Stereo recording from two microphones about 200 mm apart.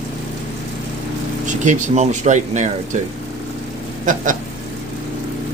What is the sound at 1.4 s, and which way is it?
Speech, 40° right (ahead or behind).